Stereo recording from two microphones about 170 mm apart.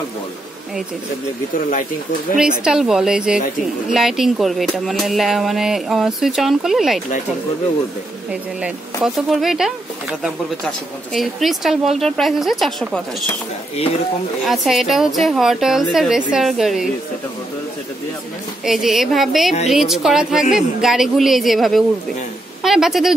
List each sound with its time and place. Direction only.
1.5 s speech: 50° left (ahead or behind)
2.6 s speech: 5° right (ahead or behind)
8.3 s speech: 5° right (ahead or behind)
11.1 s speech: centre (ahead or behind)
14.4 s speech: centre (ahead or behind)
18.7 s a woman's voice: centre (ahead or behind)